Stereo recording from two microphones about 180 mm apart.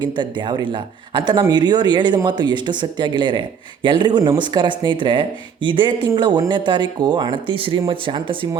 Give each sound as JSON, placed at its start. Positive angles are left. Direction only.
{"t": 0.0, "sound": "speech", "side_deg": -25}